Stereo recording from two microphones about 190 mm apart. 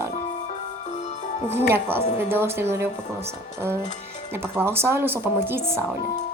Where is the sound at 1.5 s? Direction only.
10° right (ahead or behind).